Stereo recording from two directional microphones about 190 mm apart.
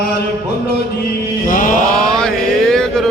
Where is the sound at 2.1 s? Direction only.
5° left (ahead or behind).